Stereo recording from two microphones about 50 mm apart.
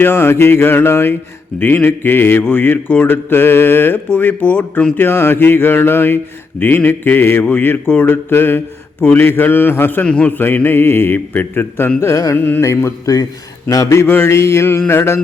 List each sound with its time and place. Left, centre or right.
0.0 s a man's voice: left
1.5 s a man's voice: left
4.9 s a man's voice: left
11.9 s carnatic music: left
14.1 s mantra: left